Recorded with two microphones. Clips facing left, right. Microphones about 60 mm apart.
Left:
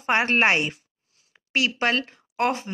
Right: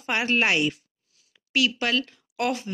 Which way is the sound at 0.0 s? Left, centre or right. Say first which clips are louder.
Left 3 dB; left.